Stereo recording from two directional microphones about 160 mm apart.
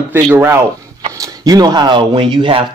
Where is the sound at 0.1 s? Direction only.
15° right (ahead or behind).